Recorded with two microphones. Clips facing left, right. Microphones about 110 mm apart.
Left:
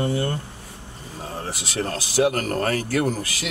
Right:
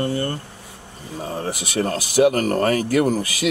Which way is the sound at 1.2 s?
15° right (ahead or behind).